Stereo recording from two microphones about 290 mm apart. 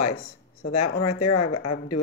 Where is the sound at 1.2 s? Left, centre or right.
Left.